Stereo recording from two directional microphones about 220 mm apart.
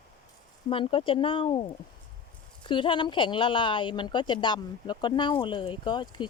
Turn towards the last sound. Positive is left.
turn(degrees=20)  # may be behind; listen again after turning